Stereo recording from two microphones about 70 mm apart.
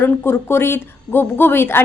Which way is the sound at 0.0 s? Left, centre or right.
Left.